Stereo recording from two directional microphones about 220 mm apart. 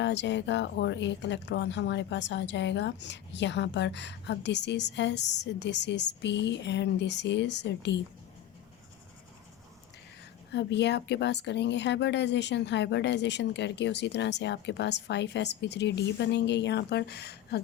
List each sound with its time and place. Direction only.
0.0 s speech: 55° left (ahead or behind)
10.5 s speech: 50° left (ahead or behind)